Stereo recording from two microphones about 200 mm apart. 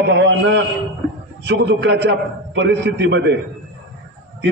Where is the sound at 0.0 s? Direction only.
60° right (ahead or behind).